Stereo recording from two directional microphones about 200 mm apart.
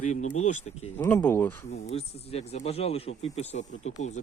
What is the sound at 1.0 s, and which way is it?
Speech, 10° left (ahead or behind).